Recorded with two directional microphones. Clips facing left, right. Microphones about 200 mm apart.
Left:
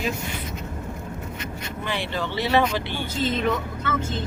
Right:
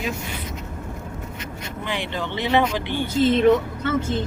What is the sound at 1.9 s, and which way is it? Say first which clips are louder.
Speech: even; 15° right (ahead or behind).